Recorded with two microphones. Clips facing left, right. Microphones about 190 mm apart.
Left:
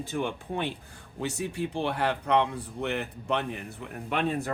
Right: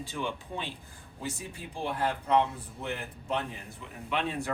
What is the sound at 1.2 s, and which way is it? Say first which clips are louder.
A man's voice: left 8 dB; 70° left (ahead or behind).